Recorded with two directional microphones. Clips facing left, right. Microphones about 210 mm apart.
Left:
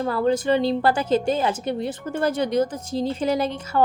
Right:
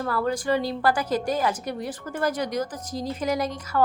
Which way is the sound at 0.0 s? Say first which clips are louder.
Left 5 dB; 25° left (ahead or behind).